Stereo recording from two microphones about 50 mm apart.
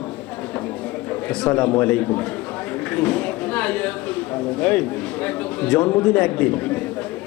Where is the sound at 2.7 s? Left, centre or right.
Left.